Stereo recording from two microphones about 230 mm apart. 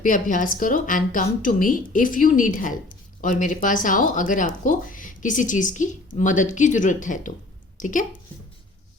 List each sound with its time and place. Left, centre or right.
0.0 s a woman's voice: left